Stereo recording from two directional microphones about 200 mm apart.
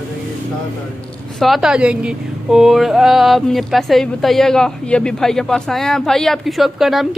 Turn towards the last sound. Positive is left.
turn(degrees=0)  # may be behind; listen again after turning